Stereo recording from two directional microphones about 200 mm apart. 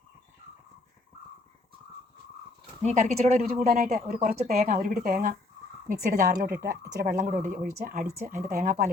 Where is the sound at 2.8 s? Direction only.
35° right (ahead or behind).